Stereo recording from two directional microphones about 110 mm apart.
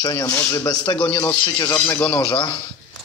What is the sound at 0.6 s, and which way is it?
Speech, 40° left (ahead or behind).